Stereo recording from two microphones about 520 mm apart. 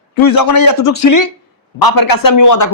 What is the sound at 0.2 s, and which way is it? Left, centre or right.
A woman's voice, left.